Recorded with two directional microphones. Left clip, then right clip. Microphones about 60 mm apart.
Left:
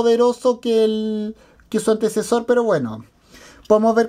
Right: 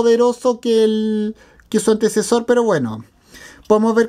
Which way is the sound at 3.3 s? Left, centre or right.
Centre.